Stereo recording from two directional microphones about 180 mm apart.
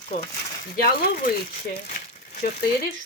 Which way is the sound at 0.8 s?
55° left (ahead or behind).